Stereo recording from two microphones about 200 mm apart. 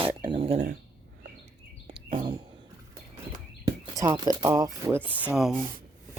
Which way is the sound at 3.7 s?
20° right (ahead or behind).